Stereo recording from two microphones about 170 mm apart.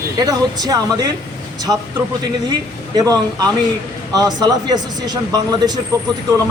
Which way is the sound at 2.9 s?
20° right (ahead or behind).